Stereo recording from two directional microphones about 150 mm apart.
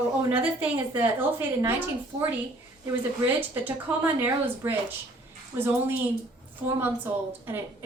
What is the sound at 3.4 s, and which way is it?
A woman's voice, 10° right (ahead or behind).